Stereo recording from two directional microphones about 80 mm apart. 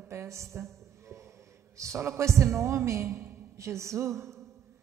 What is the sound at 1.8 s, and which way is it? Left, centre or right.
A man's voice, right.